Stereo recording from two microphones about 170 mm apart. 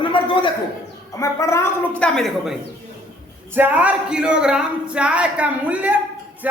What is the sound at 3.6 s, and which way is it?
Speech, 10° right (ahead or behind).